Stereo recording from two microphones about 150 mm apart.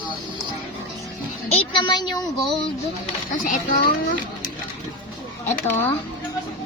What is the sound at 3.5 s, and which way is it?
Speech, 75° left (ahead or behind).